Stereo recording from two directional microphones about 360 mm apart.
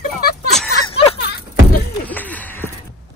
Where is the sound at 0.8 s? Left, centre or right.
Centre.